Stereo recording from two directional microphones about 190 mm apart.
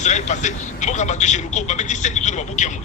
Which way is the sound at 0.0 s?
40° left (ahead or behind).